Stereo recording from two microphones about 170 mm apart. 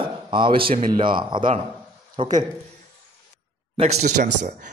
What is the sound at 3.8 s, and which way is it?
Speech, 40° right (ahead or behind).